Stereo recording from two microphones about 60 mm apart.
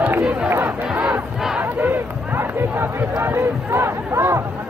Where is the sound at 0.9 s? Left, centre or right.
Right.